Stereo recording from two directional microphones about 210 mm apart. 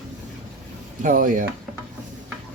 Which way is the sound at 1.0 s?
40° right (ahead or behind).